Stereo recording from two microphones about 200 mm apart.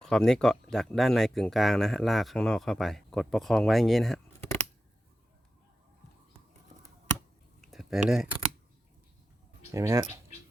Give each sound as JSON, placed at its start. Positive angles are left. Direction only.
{"t": 0.0, "sound": "speech", "side_deg": 0}
{"t": 7.6, "sound": "a sound", "side_deg": 0}
{"t": 9.7, "sound": "speech", "side_deg": -15}